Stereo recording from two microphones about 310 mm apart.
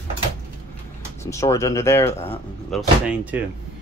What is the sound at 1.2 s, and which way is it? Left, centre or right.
Speech, centre.